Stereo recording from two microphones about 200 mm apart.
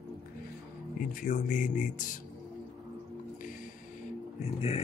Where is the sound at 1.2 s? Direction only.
40° left (ahead or behind).